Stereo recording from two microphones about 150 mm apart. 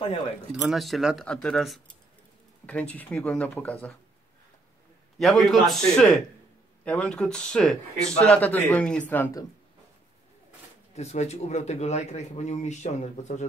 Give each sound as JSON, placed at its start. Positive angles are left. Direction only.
{"t": 0.5, "sound": "speech", "side_deg": 0}
{"t": 5.2, "sound": "speech", "side_deg": 0}
{"t": 11.0, "sound": "speech", "side_deg": 45}